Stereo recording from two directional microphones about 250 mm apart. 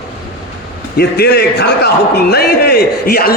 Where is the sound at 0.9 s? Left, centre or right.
Left.